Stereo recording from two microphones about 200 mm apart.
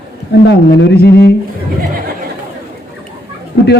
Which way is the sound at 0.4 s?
60° left (ahead or behind).